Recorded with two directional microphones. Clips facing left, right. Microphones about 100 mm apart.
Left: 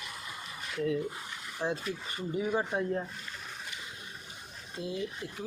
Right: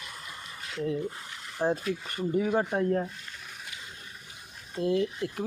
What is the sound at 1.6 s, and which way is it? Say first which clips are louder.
Speech: right 6 dB; 45° right (ahead or behind).